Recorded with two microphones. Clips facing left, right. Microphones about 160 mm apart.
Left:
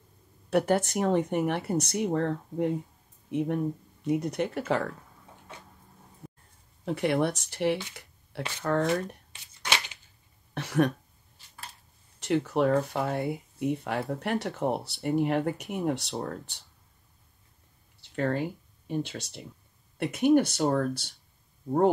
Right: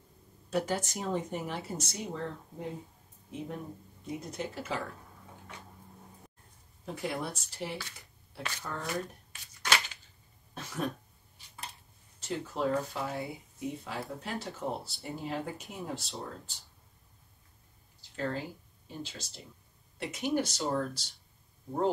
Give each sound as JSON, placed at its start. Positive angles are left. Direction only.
{"t": 0.5, "sound": "speech", "side_deg": 60}
{"t": 6.8, "sound": "speech", "side_deg": 70}
{"t": 9.3, "sound": "tearing", "side_deg": 25}
{"t": 10.5, "sound": "speech", "side_deg": 70}
{"t": 12.2, "sound": "speech", "side_deg": 70}
{"t": 18.0, "sound": "speech", "side_deg": 60}